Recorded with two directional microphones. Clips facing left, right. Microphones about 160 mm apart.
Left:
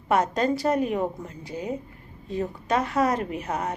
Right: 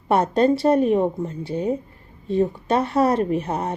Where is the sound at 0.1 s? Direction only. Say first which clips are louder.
Right 5 dB; 30° right (ahead or behind).